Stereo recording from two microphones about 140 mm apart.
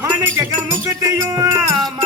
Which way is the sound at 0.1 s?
20° right (ahead or behind).